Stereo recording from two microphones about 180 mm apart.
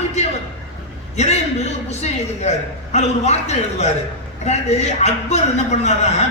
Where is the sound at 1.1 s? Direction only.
40° left (ahead or behind).